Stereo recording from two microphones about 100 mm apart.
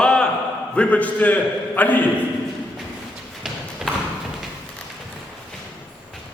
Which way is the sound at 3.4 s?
Centre (ahead or behind).